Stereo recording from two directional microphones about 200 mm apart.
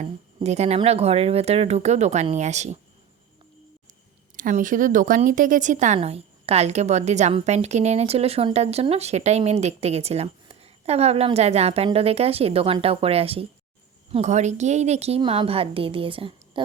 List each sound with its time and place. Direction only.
0.3 s speech: 35° right (ahead or behind)
4.4 s a woman's voice: 40° right (ahead or behind)